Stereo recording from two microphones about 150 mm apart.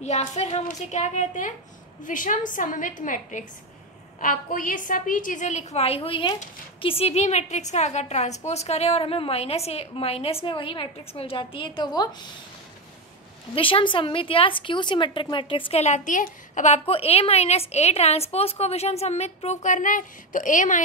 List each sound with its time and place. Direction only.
0.0 s a woman's voice: 50° left (ahead or behind); by 12.3 s 30° left (ahead or behind)
13.6 s a woman's voice: 35° left (ahead or behind)
15.8 s a woman's voice: 55° left (ahead or behind)